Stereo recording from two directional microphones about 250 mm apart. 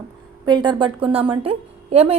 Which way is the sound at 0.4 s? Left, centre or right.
Centre.